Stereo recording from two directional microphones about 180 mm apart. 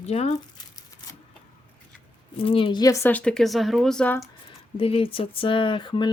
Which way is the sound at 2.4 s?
30° left (ahead or behind).